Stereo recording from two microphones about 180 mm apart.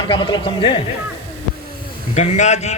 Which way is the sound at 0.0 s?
25° left (ahead or behind).